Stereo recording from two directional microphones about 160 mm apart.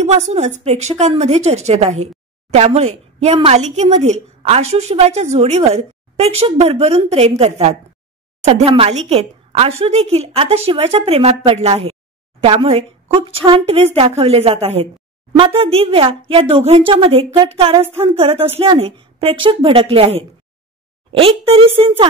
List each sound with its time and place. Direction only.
0.0 s a woman's voice: 40° right (ahead or behind)